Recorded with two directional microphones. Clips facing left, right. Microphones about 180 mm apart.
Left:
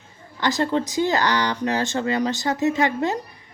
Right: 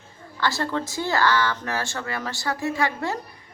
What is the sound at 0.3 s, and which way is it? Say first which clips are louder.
A woman's voice: left 4 dB; 20° left (ahead or behind).